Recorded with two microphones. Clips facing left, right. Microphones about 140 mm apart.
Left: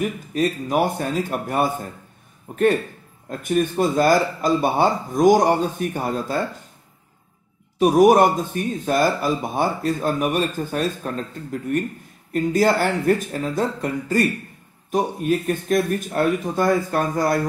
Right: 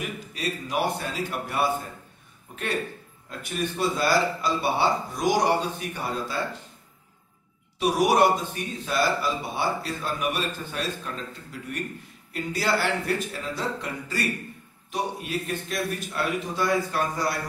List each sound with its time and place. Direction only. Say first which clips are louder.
0.0 s speech: left 10 dB; 45° left (ahead or behind)
7.8 s speech: left 7 dB; 45° left (ahead or behind)